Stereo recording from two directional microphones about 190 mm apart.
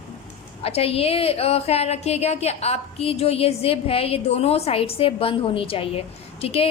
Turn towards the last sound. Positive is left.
turn(degrees=30)  # may be behind; listen again after turning